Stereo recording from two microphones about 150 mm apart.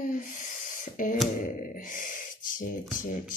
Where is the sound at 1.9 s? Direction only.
65° left (ahead or behind).